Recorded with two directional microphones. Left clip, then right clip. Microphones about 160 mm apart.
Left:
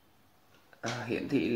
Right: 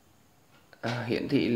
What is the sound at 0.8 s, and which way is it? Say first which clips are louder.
Speech: right 4 dB; 5° right (ahead or behind).